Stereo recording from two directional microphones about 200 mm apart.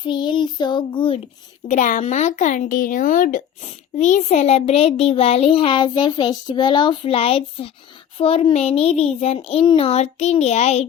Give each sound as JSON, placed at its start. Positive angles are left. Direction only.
{"t": 0.0, "sound": "child singing", "side_deg": 25}
{"t": 1.6, "sound": "speech", "side_deg": 35}